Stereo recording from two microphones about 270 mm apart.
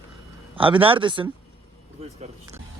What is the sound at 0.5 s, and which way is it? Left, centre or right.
Speech, centre.